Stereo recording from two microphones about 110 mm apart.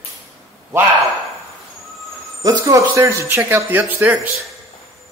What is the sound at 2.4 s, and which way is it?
Speech, 35° right (ahead or behind).